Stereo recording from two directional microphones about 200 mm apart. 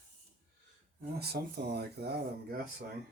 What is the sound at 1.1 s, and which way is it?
Speech, 55° right (ahead or behind).